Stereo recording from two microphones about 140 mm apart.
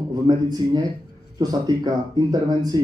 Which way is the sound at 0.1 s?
25° right (ahead or behind).